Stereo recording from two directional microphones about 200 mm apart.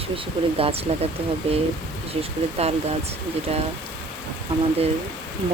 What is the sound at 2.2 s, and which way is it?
Speech, 30° right (ahead or behind).